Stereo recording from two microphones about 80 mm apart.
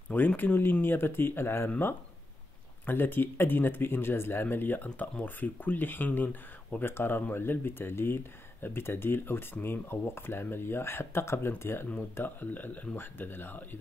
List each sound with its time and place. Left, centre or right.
0.4 s speech: left